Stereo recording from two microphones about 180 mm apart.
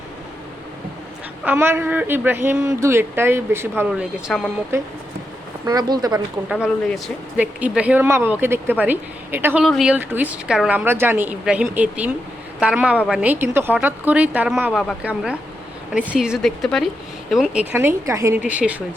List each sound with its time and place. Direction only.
1.5 s a woman's voice: 10° right (ahead or behind)
4.7 s speech: 15° right (ahead or behind)
6.5 s a woman's voice: 5° right (ahead or behind)